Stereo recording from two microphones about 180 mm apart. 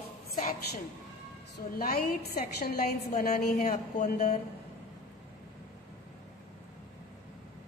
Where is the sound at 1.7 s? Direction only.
55° left (ahead or behind).